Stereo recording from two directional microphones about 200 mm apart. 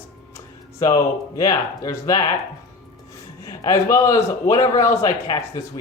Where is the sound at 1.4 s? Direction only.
20° left (ahead or behind).